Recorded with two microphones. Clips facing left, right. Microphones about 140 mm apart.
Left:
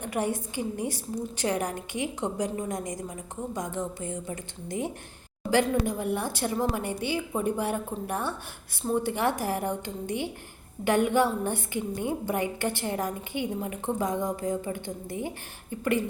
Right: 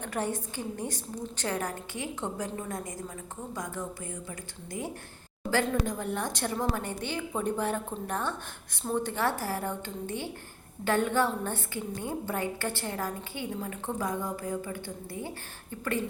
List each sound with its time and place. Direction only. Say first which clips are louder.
0.0 s a woman's voice: left 3 dB; 10° left (ahead or behind)